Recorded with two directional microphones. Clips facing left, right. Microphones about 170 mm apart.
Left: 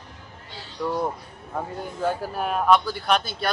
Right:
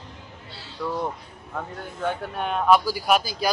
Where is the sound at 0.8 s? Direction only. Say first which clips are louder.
Left 2 dB; 5° left (ahead or behind).